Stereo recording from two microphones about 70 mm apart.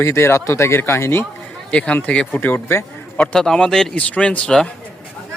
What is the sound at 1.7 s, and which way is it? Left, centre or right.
Speech, centre.